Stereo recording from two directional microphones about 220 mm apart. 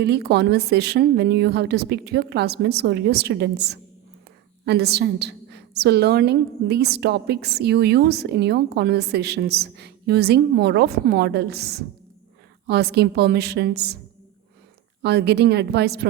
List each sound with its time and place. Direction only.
0.0 s a woman's voice: 50° right (ahead or behind)
15.0 s a woman's voice: 50° right (ahead or behind)